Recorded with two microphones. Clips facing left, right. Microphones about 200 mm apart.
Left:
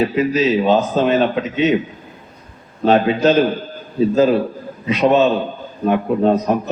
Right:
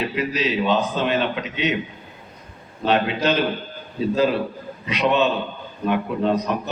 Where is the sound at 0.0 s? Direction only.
45° left (ahead or behind).